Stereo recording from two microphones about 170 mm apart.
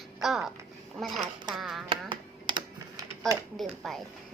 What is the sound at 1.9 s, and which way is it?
Typing, 30° right (ahead or behind).